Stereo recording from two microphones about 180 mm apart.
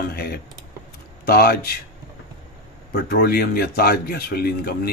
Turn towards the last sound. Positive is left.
turn(degrees=55)  # may be behind; listen again after turning